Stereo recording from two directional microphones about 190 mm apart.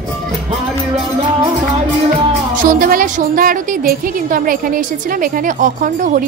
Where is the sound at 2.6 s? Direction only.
45° right (ahead or behind).